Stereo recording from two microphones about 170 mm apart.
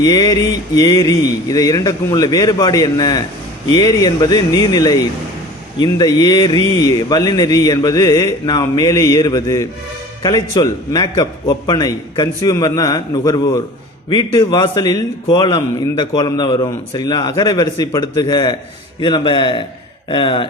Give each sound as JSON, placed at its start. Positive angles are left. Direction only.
{"t": 0.0, "sound": "a man's voice", "side_deg": 20}